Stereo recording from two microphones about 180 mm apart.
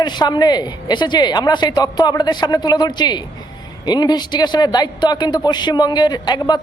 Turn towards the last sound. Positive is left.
turn(degrees=25)  # may be behind; listen again after turning